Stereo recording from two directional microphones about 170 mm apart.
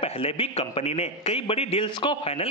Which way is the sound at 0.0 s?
35° left (ahead or behind).